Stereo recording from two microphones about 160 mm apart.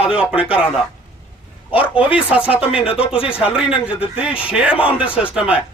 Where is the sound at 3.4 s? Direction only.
5° right (ahead or behind).